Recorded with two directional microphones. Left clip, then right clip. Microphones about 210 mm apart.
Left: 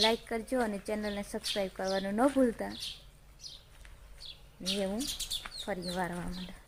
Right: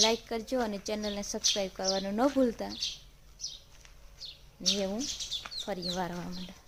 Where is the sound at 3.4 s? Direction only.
50° right (ahead or behind).